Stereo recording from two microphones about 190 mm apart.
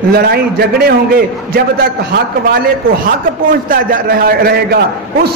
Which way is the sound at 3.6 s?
50° right (ahead or behind).